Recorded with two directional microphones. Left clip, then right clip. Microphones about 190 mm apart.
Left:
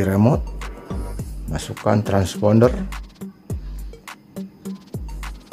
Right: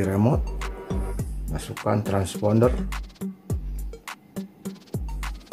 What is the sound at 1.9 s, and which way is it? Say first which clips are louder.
Speech: left 5 dB; 15° left (ahead or behind).